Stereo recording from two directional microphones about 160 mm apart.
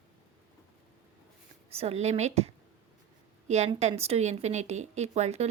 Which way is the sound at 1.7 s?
40° right (ahead or behind).